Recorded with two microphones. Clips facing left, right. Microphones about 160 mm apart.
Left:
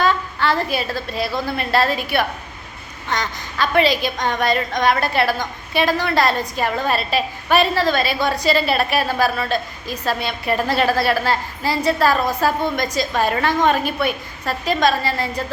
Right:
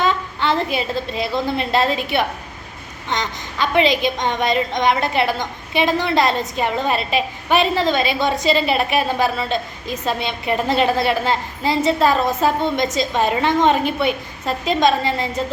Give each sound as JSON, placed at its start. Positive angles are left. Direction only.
{"t": 0.0, "sound": "a woman's voice", "side_deg": -20}